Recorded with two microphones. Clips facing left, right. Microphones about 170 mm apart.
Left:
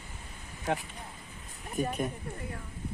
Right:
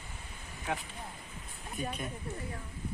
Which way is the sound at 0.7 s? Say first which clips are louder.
Left 5 dB; 40° left (ahead or behind).